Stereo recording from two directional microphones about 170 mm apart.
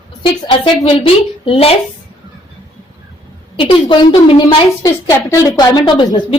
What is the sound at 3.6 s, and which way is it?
A woman's voice, 30° left (ahead or behind).